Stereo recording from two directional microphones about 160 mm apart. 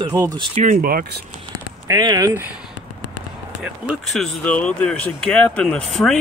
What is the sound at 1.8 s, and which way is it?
Speech, 20° right (ahead or behind).